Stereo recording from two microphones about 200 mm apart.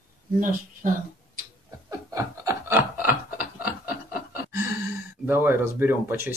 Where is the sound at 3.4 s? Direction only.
45° left (ahead or behind).